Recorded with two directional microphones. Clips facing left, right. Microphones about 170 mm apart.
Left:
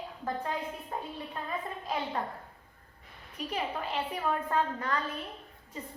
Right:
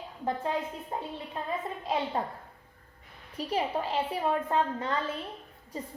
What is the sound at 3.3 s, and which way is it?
A woman's voice, 30° right (ahead or behind).